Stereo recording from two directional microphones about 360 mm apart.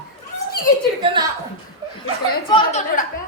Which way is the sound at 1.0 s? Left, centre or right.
Centre.